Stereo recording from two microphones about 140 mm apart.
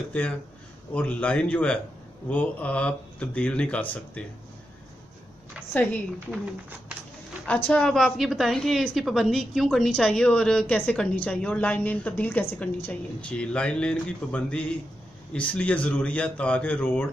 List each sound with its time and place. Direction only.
0.9 s a woman's voice: 10° left (ahead or behind)
5.7 s a woman's voice: 10° left (ahead or behind)
7.4 s a woman's voice: 10° left (ahead or behind)